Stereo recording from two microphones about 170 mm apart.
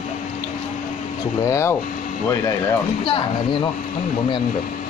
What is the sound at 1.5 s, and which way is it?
Speech, 15° left (ahead or behind).